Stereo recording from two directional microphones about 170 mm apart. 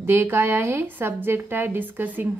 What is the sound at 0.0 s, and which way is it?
A woman's voice, 15° right (ahead or behind).